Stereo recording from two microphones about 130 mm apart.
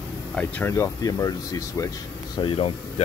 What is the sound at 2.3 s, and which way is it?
Speech, 40° left (ahead or behind).